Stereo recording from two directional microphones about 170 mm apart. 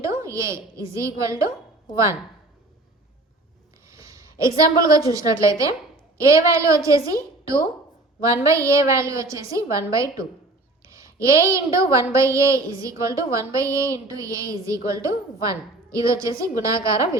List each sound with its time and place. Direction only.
0.0 s a woman's voice: 15° right (ahead or behind)
3.8 s a woman's voice: 20° right (ahead or behind)